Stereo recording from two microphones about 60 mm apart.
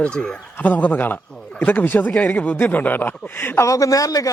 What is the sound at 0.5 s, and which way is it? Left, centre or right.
A man's voice, left.